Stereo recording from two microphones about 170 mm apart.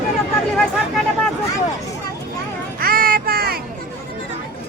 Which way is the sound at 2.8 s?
55° right (ahead or behind).